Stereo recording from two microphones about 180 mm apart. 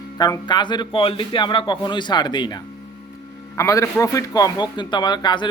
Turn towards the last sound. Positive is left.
turn(degrees=25)  # may be behind; listen again after turning